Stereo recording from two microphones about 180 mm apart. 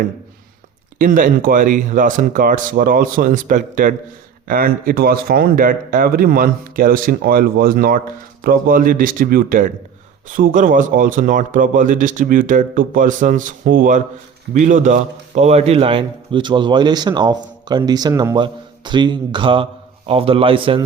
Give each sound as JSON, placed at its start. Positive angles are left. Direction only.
{"t": 0.9, "sound": "a man's voice", "side_deg": -50}